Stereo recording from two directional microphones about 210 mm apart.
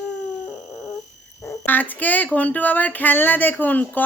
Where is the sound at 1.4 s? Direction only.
10° left (ahead or behind).